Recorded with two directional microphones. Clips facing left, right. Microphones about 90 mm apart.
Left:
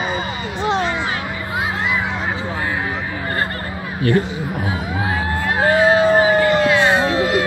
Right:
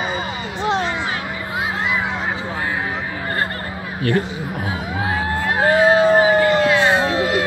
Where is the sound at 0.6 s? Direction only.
Centre (ahead or behind).